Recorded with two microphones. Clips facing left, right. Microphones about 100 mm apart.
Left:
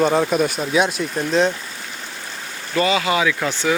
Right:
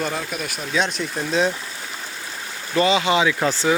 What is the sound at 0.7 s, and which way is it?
Speech, 10° left (ahead or behind).